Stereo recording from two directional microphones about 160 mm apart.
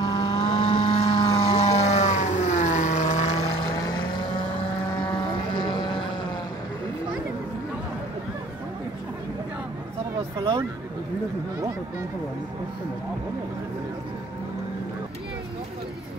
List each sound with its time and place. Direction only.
0.0 s vehicle: 30° left (ahead or behind); by 3.3 s 45° left (ahead or behind)
3.8 s vehicle: 30° left (ahead or behind)
5.5 s vehicle: 30° left (ahead or behind)